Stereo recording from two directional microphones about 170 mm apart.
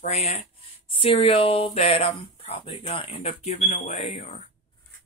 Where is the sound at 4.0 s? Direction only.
35° left (ahead or behind).